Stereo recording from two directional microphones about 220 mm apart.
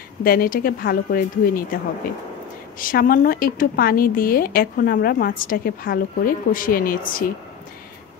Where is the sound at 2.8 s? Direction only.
40° left (ahead or behind).